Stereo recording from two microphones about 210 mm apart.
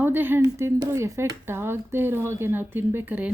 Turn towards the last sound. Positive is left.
turn(degrees=-10)  # may be behind; listen again after turning